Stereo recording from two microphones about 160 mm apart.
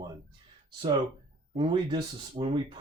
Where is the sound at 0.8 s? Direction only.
35° right (ahead or behind).